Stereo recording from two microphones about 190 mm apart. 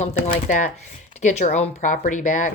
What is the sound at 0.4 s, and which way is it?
Speech, 40° left (ahead or behind).